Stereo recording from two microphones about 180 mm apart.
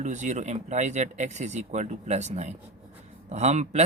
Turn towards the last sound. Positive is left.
turn(degrees=-40)  # may be behind; listen again after turning